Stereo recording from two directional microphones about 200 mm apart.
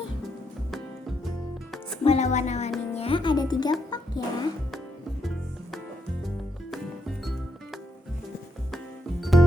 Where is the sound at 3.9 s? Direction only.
20° left (ahead or behind).